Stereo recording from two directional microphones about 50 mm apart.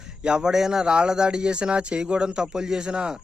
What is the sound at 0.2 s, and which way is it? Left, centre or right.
Speech, centre.